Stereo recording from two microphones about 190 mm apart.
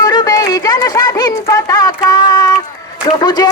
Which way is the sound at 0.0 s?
20° left (ahead or behind).